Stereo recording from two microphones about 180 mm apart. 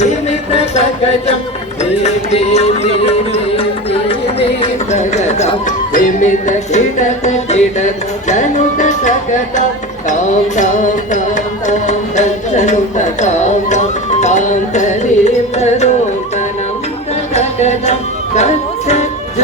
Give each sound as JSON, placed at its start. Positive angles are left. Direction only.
{"t": 0.0, "sound": "music", "side_deg": 35}
{"t": 4.1, "sound": "a sound", "side_deg": 35}
{"t": 8.3, "sound": "music", "side_deg": 40}
{"t": 17.3, "sound": "chant", "side_deg": 35}
{"t": 18.3, "sound": "music", "side_deg": 40}